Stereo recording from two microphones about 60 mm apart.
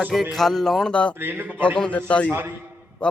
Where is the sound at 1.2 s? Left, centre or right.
Right.